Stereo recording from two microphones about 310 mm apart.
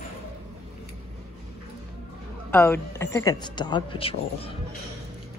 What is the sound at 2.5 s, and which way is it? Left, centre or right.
Speech, centre.